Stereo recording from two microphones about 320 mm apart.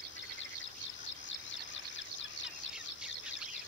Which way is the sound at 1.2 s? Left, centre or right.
Left.